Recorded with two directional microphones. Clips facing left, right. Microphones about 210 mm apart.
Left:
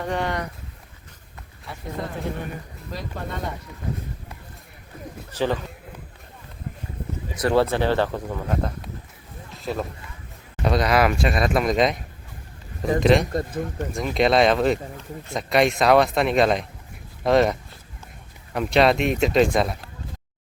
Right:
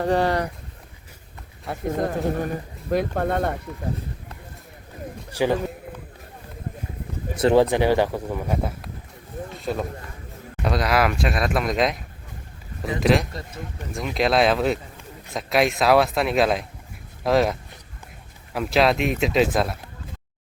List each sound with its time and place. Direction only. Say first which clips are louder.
0.0 s speech: right 5 dB; 35° right (ahead or behind)
1.6 s speech: right 7 dB; 50° right (ahead or behind)
2.9 s speech: right 10 dB; 55° right (ahead or behind)
5.3 s speech: right 2 dB; 10° right (ahead or behind)
7.3 s speech: right 3 dB; 20° right (ahead or behind)
9.5 s run: even; centre (ahead or behind)
10.6 s speech: left 2 dB; centre (ahead or behind)
13.0 s speech: left 2 dB; centre (ahead or behind)